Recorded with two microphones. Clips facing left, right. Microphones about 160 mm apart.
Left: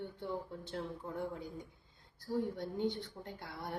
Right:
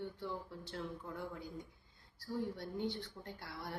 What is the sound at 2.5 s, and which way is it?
A woman's voice, 20° left (ahead or behind).